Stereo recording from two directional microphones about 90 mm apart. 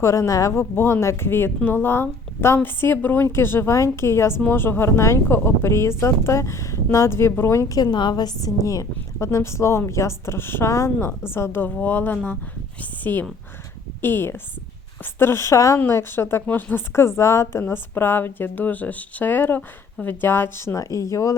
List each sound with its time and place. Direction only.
0.0 s a woman's voice: 35° left (ahead or behind)
0.6 s a woman's voice: 25° left (ahead or behind)
7.8 s a woman's voice: 55° left (ahead or behind); by 21.3 s 40° left (ahead or behind)